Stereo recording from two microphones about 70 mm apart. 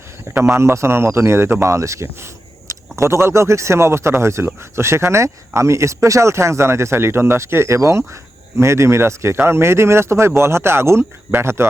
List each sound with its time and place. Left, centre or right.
0.3 s speech: right